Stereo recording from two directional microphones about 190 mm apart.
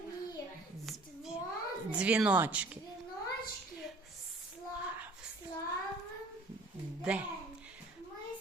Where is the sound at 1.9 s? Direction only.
5° right (ahead or behind).